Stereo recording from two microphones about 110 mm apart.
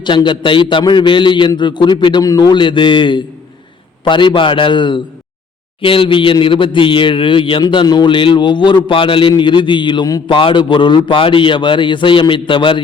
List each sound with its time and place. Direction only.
0.0 s a man's voice: 45° left (ahead or behind)
2.2 s a man's voice: 35° left (ahead or behind)